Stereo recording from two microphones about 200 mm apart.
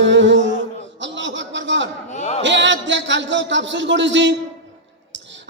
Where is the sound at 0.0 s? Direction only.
65° right (ahead or behind).